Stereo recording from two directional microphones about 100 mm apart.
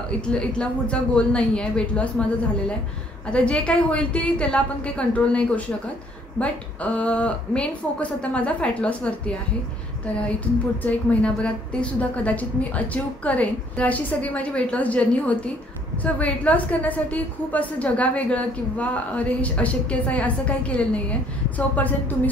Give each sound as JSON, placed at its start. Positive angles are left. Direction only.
{"t": 0.2, "sound": "a woman's voice", "side_deg": 10}
{"t": 3.3, "sound": "a woman's voice", "side_deg": 10}
{"t": 10.8, "sound": "a woman's voice", "side_deg": 15}